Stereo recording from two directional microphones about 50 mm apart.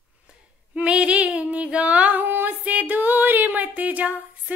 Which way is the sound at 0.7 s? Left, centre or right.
Right.